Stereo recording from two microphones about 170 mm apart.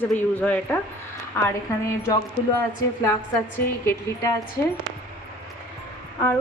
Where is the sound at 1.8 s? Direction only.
20° left (ahead or behind).